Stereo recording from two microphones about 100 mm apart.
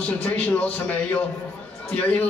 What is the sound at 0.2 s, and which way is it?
Speech, 15° left (ahead or behind).